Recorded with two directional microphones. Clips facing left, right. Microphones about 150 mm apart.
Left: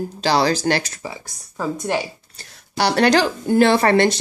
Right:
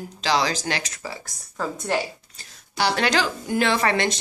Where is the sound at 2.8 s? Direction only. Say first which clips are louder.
Left 6 dB; 40° left (ahead or behind).